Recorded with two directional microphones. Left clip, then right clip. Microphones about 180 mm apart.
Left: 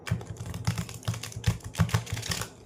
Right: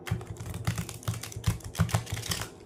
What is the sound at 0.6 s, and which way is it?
Typing, 5° right (ahead or behind).